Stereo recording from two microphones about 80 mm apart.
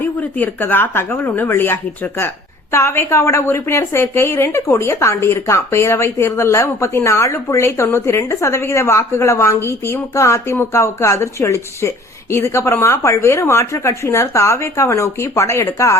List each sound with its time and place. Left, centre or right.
0.0 s a woman's voice: left